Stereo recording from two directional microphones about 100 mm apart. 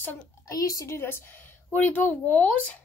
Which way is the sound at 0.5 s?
35° left (ahead or behind).